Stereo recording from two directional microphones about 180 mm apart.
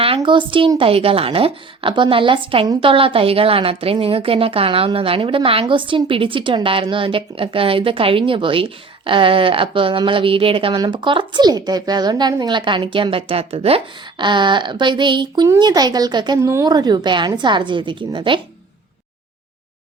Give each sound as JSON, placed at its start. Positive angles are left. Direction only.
{"t": 0.0, "sound": "speech", "side_deg": -30}